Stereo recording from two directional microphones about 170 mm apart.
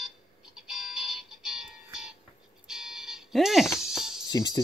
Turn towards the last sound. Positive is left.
turn(degrees=25)  # may be behind; listen again after turning